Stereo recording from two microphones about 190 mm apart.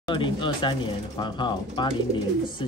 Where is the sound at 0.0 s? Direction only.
25° left (ahead or behind).